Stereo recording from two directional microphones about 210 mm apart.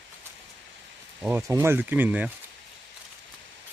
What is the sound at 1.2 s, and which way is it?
Speech, 10° right (ahead or behind).